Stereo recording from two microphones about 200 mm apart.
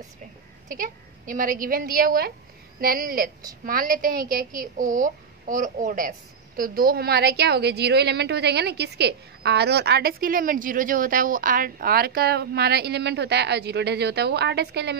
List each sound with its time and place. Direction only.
0.7 s a child's voice: 45° right (ahead or behind)